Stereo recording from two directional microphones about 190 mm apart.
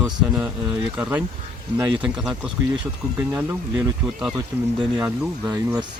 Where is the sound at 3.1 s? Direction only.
10° right (ahead or behind).